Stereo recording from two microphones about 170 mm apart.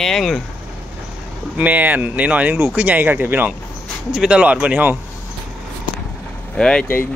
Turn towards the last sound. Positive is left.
turn(degrees=10)  # may be behind; listen again after turning